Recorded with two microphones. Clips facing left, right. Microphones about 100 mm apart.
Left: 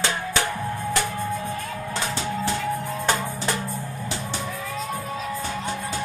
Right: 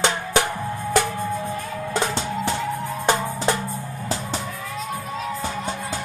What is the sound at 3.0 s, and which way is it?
Music, 20° right (ahead or behind).